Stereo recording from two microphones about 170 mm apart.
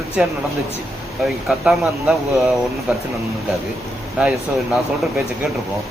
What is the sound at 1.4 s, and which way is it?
Speech, centre (ahead or behind).